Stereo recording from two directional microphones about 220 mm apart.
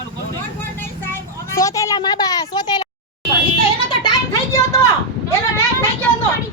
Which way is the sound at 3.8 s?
15° left (ahead or behind).